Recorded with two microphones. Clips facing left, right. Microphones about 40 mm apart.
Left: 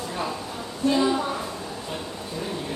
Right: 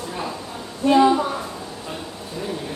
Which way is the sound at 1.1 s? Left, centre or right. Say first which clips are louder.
Right 4 dB; centre.